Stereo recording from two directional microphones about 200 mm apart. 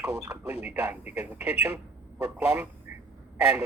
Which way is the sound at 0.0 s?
5° right (ahead or behind).